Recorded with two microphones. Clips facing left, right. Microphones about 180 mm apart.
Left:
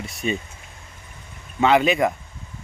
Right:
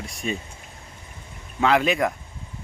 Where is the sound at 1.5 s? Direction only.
Centre (ahead or behind).